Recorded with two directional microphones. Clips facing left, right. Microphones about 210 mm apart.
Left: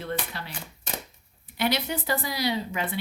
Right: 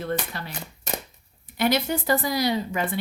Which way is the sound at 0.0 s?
45° right (ahead or behind).